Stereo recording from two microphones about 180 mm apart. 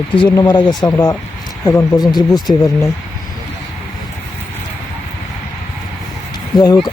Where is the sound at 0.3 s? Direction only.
25° left (ahead or behind).